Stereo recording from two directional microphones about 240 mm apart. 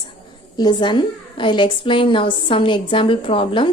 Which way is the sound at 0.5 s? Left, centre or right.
Centre.